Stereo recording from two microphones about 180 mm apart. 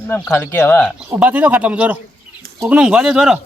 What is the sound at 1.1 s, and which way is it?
A man's voice, 10° right (ahead or behind).